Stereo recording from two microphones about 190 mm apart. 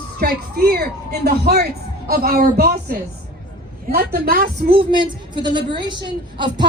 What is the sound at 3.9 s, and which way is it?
Speech, 50° right (ahead or behind).